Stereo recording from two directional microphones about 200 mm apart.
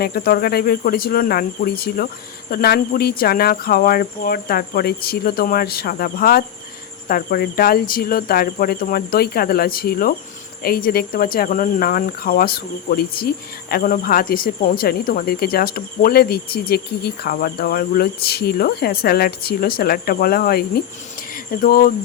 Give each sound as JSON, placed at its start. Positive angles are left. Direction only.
{"t": 0.0, "sound": "speech", "side_deg": 50}